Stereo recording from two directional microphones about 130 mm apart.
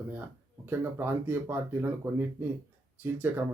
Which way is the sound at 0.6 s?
15° right (ahead or behind).